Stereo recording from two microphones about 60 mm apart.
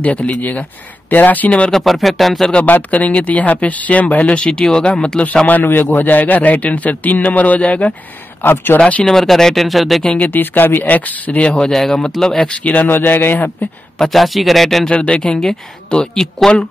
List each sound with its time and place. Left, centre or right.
0.0 s speech: left
1.7 s speech: centre
2.5 s speech: left
5.5 s speech: left
8.4 s speech: left
8.7 s speech: left
9.0 s speech: centre
10.0 s speech: left
11.7 s speech: centre; by 12.9 s left
12.9 s speech: left
13.9 s speech: centre
14.9 s speech: centre